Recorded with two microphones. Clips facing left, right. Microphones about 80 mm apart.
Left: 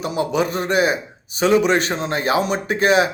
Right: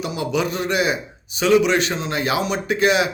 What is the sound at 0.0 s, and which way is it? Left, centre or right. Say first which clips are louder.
A man's voice: left 2 dB; left.